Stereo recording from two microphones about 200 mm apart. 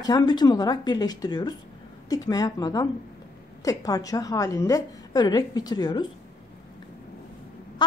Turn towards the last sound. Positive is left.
turn(degrees=20)  # may be behind; listen again after turning